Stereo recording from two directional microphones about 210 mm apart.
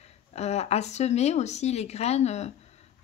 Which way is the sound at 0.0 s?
30° left (ahead or behind).